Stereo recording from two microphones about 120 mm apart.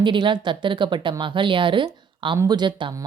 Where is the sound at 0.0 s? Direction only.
40° right (ahead or behind).